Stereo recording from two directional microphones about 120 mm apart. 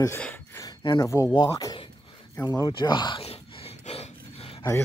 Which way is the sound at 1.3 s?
35° left (ahead or behind).